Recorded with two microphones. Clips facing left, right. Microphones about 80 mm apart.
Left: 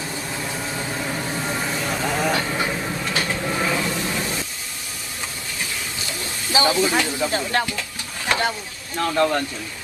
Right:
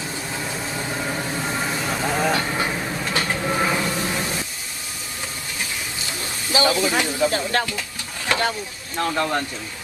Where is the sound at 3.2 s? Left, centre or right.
Right.